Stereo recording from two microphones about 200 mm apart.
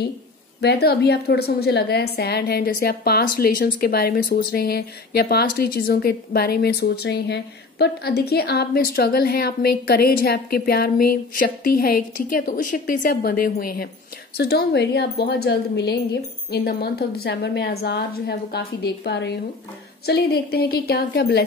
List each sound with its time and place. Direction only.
0.6 s a woman's voice: 55° left (ahead or behind)
17.7 s a woman's voice: 75° left (ahead or behind); by 21.4 s 55° left (ahead or behind)